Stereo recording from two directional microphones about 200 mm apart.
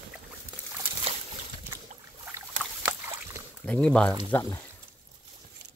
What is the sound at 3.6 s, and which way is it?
Speech, 5° left (ahead or behind).